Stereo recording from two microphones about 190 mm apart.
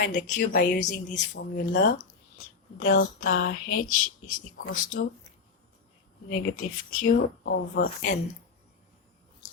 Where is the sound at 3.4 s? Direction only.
90° left.